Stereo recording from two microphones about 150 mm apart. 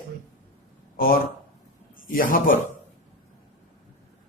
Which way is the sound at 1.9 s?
70° left (ahead or behind).